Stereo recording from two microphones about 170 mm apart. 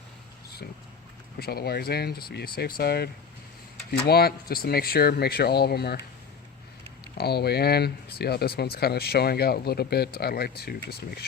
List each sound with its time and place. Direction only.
1.4 s speech: 65° left (ahead or behind)
7.2 s speech: 70° left (ahead or behind)